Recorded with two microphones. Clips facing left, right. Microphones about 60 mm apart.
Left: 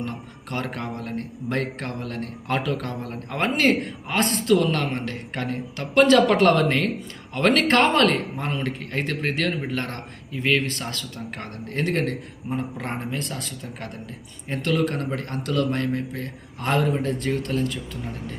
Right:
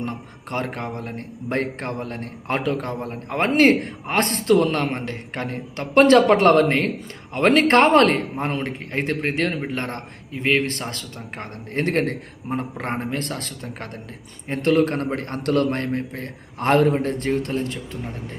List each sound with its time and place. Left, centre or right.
0.5 s a man's voice: right